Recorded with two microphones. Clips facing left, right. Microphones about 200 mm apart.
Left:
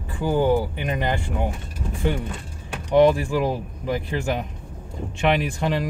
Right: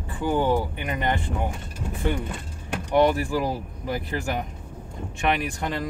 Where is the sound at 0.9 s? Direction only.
15° left (ahead or behind).